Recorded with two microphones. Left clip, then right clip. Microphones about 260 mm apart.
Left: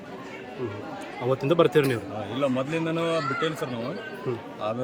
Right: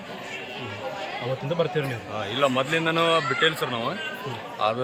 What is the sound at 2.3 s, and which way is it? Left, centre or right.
A man's voice, centre.